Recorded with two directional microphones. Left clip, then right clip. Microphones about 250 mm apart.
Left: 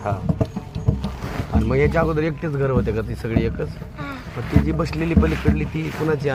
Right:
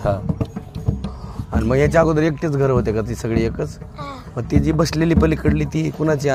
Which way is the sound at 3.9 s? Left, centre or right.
Right.